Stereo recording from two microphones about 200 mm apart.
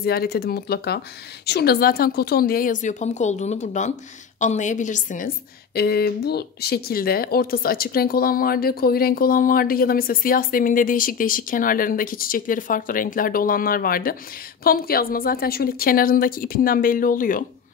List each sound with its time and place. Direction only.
0.0 s a woman's voice: 50° left (ahead or behind)
5.8 s speech: 50° left (ahead or behind)